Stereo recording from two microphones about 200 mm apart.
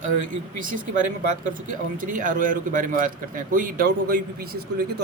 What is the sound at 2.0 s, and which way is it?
A man's voice, 45° right (ahead or behind).